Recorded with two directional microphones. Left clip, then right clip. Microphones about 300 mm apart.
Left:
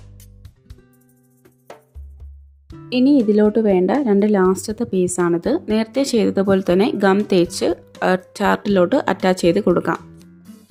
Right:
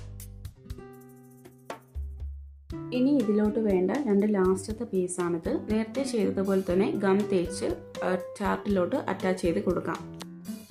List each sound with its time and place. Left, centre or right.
2.6 s music: centre
2.9 s speech: left